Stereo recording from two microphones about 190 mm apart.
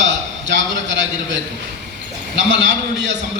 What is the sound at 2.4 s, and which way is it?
Speech, 70° right (ahead or behind).